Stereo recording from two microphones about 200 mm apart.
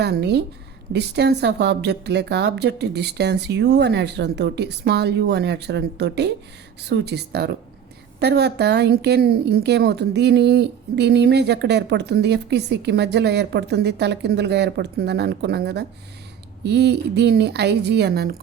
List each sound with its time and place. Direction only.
0.0 s a woman's voice: 55° right (ahead or behind)